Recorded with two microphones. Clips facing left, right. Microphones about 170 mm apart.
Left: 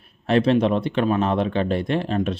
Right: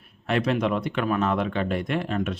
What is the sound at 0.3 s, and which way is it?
Speech, 30° left (ahead or behind).